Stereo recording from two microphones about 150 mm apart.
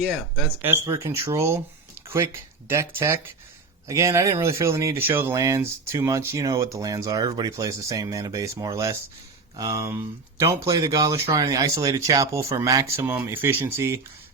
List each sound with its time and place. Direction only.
0.0 s speech: centre (ahead or behind)
0.6 s speech: 15° right (ahead or behind)